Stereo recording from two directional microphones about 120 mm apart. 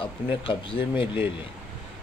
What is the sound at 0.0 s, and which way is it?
Speech, 45° left (ahead or behind).